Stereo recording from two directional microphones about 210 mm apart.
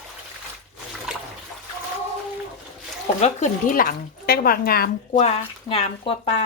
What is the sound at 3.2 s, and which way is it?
Speech, 35° left (ahead or behind).